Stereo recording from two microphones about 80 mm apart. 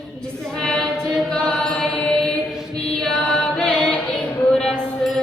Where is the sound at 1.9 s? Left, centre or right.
Centre.